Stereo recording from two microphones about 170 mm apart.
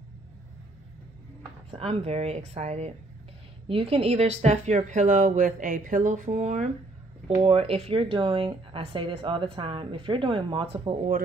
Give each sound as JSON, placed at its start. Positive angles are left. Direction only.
{"t": 1.7, "sound": "speech", "side_deg": -35}